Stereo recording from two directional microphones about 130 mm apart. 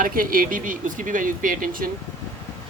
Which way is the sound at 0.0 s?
90° right.